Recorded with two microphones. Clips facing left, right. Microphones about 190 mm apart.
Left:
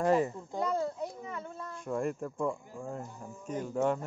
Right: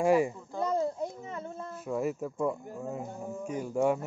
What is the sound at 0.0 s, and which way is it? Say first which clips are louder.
Speech: right 2 dB; 10° right (ahead or behind).